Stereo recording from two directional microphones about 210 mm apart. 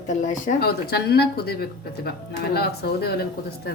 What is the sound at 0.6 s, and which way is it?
Speech, 50° left (ahead or behind).